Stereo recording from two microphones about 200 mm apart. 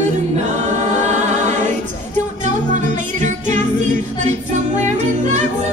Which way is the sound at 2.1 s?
40° right (ahead or behind).